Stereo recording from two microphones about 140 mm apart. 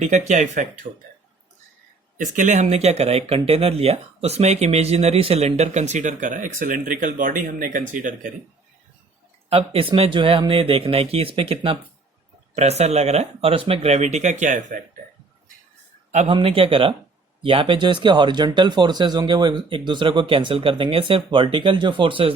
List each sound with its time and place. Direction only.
0.0 s speech: 55° right (ahead or behind)
2.1 s speech: 65° right (ahead or behind)
9.5 s speech: 45° right (ahead or behind); by 14.8 s 65° right (ahead or behind)
16.3 s speech: 40° right (ahead or behind)